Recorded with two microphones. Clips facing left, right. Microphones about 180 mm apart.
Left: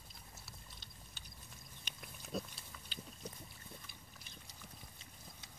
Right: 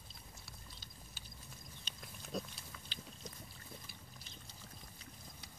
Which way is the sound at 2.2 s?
Centre (ahead or behind).